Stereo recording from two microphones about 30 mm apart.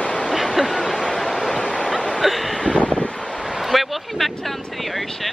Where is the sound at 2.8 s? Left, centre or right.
Left.